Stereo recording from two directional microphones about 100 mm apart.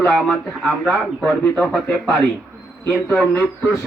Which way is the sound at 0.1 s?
5° left (ahead or behind).